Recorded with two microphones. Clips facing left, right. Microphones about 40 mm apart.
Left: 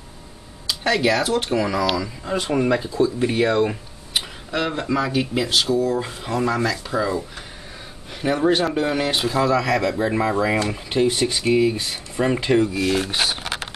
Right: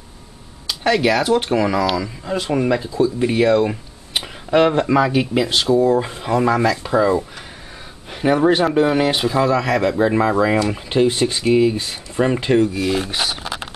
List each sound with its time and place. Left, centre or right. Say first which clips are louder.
0.7 s speech: right 3 dB; centre
2.0 s speech: right 2 dB; centre
4.5 s speech: right 10 dB; right
11.5 s speech: right 4 dB; centre